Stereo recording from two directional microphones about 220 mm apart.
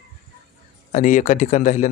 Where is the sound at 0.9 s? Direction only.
35° left (ahead or behind).